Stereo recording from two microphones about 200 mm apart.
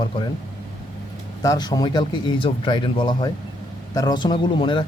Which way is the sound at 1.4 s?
20° left (ahead or behind).